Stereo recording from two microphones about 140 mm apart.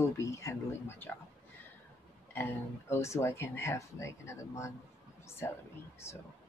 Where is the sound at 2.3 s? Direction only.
15° left (ahead or behind).